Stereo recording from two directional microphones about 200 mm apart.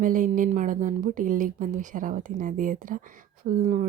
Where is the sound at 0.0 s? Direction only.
40° right (ahead or behind).